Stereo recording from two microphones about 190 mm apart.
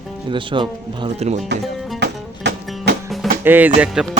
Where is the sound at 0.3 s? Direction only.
25° right (ahead or behind).